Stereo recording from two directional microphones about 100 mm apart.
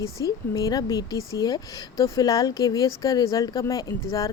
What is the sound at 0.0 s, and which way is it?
Speech, 35° left (ahead or behind).